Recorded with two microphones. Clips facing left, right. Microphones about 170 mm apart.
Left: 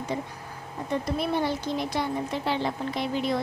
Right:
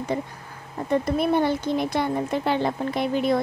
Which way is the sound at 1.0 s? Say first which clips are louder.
Right 5 dB; 55° right (ahead or behind).